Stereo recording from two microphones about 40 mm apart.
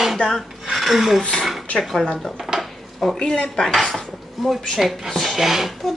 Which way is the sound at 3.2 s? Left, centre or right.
Centre.